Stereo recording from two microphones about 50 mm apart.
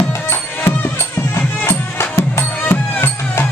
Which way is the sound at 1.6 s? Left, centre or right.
Left.